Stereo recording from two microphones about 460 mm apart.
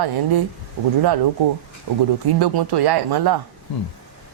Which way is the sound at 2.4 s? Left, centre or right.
Right.